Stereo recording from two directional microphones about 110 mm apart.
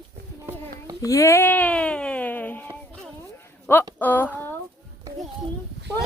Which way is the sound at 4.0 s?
15° left (ahead or behind).